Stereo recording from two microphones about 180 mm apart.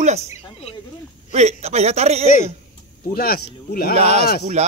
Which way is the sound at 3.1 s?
55° left (ahead or behind).